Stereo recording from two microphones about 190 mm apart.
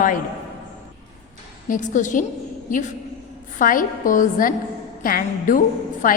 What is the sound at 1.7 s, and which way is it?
Speech, 40° left (ahead or behind).